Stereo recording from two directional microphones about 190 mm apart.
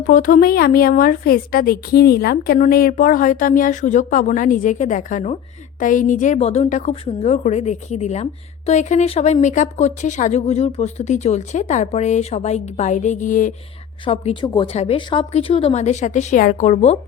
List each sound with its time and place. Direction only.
0.0 s a woman's voice: 45° left (ahead or behind)
14.0 s a woman's voice: 30° left (ahead or behind)